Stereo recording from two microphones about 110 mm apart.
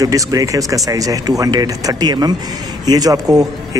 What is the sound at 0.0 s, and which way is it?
Speech, 35° right (ahead or behind).